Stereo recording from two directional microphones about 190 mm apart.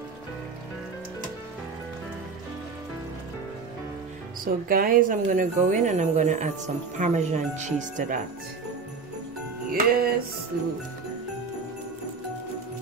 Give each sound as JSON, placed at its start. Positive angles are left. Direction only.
{"t": 4.5, "sound": "a woman's voice", "side_deg": -50}
{"t": 9.7, "sound": "music", "side_deg": -50}